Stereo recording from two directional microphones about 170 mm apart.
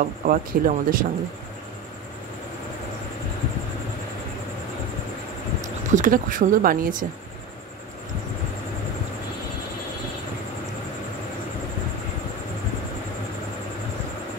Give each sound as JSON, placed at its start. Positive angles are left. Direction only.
{"t": 0.2, "sound": "speech", "side_deg": -55}
{"t": 5.9, "sound": "speech", "side_deg": -50}